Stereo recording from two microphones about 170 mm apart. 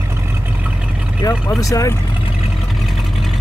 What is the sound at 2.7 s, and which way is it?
Vehicle, centre (ahead or behind).